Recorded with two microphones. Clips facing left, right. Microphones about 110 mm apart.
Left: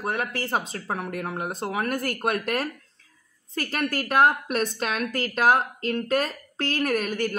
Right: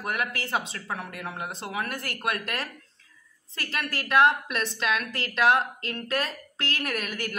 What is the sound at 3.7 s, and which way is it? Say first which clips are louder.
A woman's voice: left 1 dB; 45° left (ahead or behind).